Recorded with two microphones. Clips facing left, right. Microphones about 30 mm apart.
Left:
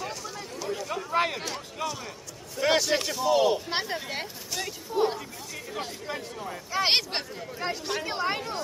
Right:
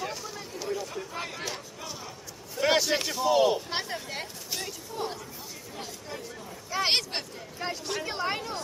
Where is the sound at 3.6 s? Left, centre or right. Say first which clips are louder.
Left 3 dB; centre.